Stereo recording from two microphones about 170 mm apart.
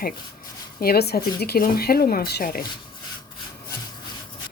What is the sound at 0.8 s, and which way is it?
Speech, 65° left (ahead or behind).